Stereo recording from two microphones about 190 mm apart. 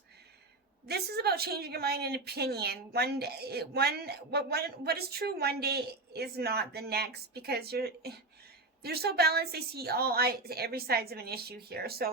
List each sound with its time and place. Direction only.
0.9 s a woman's voice: 55° right (ahead or behind)